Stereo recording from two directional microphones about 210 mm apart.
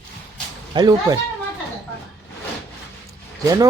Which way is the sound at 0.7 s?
20° right (ahead or behind).